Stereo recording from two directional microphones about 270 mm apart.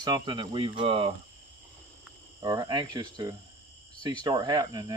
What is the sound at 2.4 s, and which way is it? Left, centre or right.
Speech, centre.